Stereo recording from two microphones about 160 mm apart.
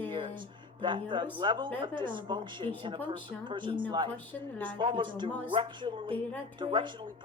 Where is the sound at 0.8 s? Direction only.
30° right (ahead or behind).